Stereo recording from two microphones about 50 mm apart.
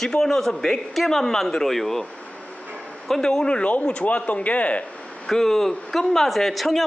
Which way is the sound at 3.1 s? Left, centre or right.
Centre.